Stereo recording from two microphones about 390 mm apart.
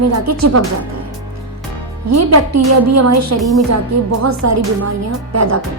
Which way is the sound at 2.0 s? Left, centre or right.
Right.